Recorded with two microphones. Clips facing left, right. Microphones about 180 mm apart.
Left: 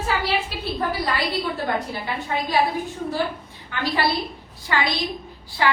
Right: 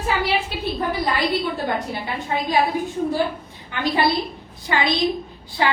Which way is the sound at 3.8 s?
20° right (ahead or behind).